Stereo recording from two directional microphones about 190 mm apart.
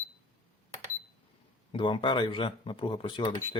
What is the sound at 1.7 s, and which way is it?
Speech, 25° left (ahead or behind).